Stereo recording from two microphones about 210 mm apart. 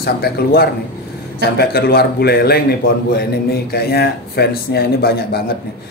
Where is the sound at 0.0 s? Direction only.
50° left (ahead or behind).